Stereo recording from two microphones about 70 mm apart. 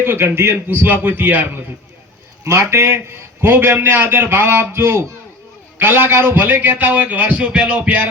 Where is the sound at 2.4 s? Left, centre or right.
Right; by 8.0 s centre.